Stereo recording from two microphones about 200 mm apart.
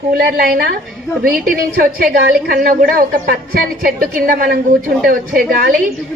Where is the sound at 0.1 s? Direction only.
50° right (ahead or behind).